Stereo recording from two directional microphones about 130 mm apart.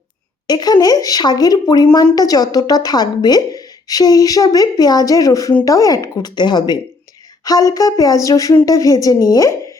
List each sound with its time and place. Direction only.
0.4 s speech: 30° left (ahead or behind)